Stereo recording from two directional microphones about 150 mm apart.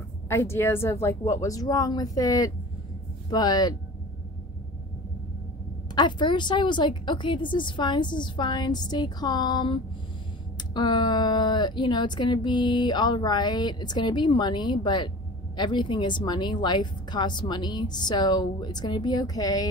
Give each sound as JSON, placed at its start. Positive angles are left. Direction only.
{"t": 0.3, "sound": "speech", "side_deg": 15}
{"t": 5.9, "sound": "a woman's voice", "side_deg": 30}